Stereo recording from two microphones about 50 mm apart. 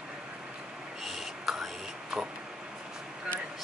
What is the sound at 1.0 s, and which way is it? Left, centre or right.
Whispering, centre.